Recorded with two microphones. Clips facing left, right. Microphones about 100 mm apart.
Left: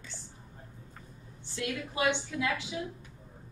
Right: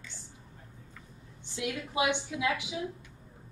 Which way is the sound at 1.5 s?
15° right (ahead or behind).